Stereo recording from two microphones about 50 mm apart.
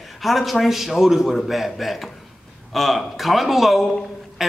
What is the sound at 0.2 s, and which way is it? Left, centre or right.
A man's voice, centre.